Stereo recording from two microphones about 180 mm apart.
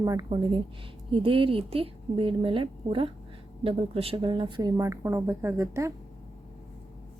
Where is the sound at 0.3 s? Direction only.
30° right (ahead or behind).